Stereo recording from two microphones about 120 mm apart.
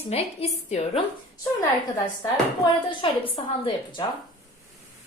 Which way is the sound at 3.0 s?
45° left (ahead or behind).